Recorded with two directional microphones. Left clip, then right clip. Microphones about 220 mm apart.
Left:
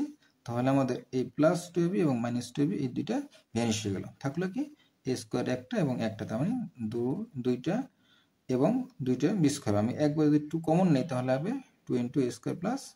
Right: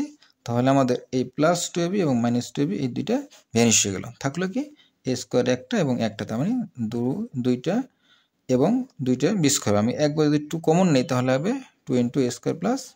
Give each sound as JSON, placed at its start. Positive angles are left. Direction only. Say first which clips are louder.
{"t": 0.0, "sound": "speech", "louder": "right 5 dB", "side_deg": -40}